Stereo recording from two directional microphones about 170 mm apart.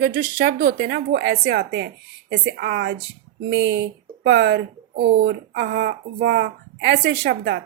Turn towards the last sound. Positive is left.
turn(degrees=-85)